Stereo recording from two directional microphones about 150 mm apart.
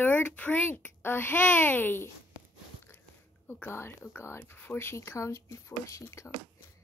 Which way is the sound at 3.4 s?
15° left (ahead or behind).